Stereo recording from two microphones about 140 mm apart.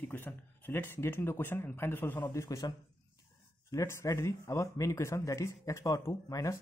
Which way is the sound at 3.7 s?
20° left (ahead or behind).